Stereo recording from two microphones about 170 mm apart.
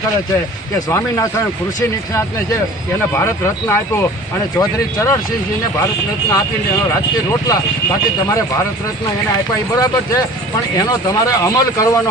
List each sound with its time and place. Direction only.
0.9 s speech: 20° left (ahead or behind)
3.2 s speech: 15° left (ahead or behind)
7.3 s speech: 20° left (ahead or behind)
9.7 s speech: 20° left (ahead or behind)